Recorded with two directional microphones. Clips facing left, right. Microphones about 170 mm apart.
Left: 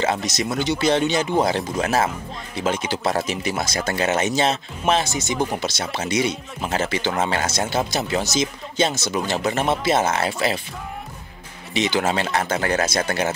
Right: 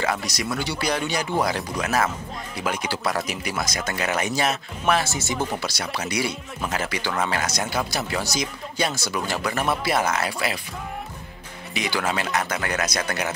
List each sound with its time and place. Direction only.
0.0 s speech: 25° left (ahead or behind)
11.7 s speech: 25° left (ahead or behind)